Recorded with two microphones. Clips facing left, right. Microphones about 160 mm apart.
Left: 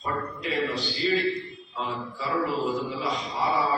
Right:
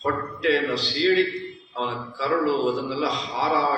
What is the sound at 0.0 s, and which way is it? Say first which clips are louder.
A man's voice: right 7 dB; 90° right.